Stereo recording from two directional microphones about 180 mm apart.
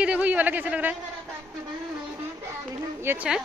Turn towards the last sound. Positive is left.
turn(degrees=-5)  # may be behind; listen again after turning